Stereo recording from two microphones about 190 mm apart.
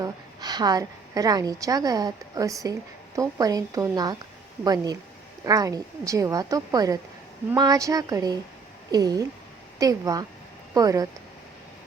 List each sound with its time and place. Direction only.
0.0 s a woman's voice: 20° right (ahead or behind)